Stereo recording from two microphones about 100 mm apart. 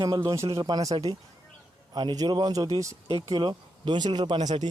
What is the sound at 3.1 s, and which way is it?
Speech, 75° right (ahead or behind).